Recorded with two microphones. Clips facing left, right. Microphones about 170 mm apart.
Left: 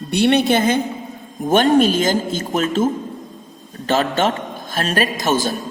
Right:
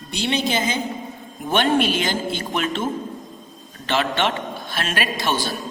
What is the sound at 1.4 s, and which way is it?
A man's voice, 40° left (ahead or behind).